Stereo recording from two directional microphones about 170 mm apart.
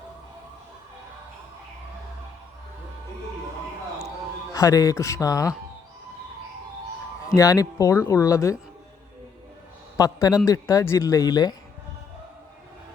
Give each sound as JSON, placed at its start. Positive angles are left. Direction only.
{"t": 4.5, "sound": "speech", "side_deg": 20}
{"t": 7.3, "sound": "speech", "side_deg": 20}
{"t": 10.0, "sound": "speech", "side_deg": 20}